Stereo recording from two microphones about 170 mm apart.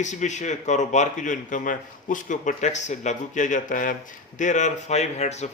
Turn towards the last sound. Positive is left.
turn(degrees=40)  # may be behind; listen again after turning